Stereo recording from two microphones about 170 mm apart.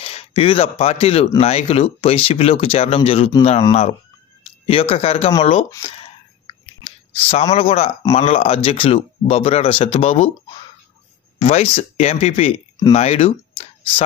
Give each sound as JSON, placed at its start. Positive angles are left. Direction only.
{"t": 0.0, "sound": "speech", "side_deg": 35}
{"t": 4.4, "sound": "speech", "side_deg": 35}
{"t": 5.9, "sound": "clicking", "side_deg": 35}
{"t": 7.5, "sound": "speech", "side_deg": 35}
{"t": 11.3, "sound": "speech", "side_deg": 35}